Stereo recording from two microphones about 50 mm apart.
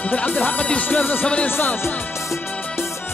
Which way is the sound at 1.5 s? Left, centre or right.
Left.